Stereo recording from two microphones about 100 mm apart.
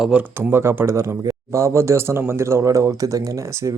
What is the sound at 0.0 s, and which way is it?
Speech, 10° right (ahead or behind).